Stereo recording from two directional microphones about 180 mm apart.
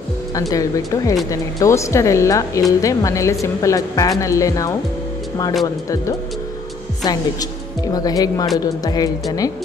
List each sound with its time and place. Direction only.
0.3 s speech: 20° left (ahead or behind)
7.1 s speech: 20° left (ahead or behind)